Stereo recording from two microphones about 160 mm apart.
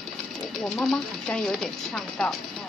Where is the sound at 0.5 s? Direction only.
Centre (ahead or behind).